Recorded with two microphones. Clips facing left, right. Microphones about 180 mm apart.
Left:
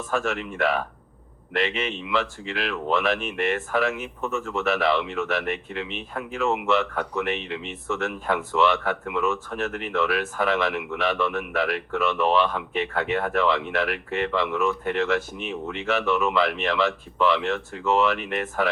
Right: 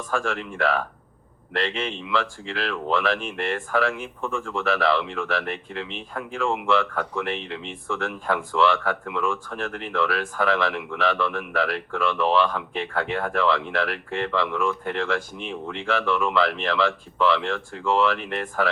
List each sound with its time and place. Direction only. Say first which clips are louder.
0.2 s speech: left 1 dB; 5° left (ahead or behind)